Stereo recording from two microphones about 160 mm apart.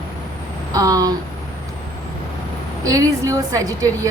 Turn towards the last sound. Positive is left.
turn(degrees=-20)  # may be behind; listen again after turning